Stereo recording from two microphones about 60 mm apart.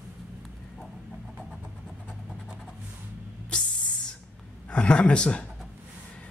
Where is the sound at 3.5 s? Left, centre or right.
Centre.